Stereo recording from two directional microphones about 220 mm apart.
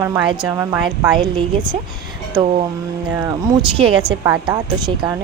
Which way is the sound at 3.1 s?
15° right (ahead or behind).